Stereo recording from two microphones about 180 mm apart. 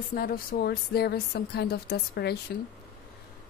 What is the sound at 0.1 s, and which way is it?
A woman's voice, 55° left (ahead or behind).